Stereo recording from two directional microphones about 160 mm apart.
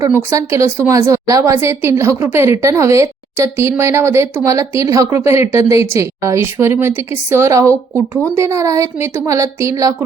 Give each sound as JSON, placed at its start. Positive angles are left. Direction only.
{"t": 0.0, "sound": "speech", "side_deg": -20}